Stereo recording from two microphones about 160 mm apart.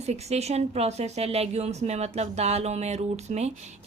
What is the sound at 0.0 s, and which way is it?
A woman's voice, 45° right (ahead or behind).